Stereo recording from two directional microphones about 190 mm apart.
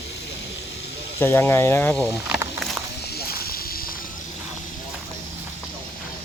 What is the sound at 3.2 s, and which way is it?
Snake, 55° left (ahead or behind).